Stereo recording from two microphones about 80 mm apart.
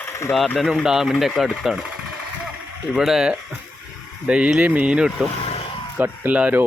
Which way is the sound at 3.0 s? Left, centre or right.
Centre.